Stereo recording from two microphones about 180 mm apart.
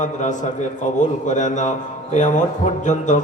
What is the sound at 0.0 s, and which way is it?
A man's voice, 45° left (ahead or behind).